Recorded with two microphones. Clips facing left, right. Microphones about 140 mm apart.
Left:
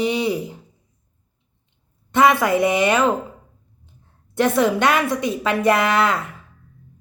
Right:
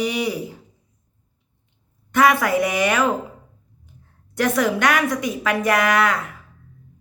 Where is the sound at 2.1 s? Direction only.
25° left (ahead or behind).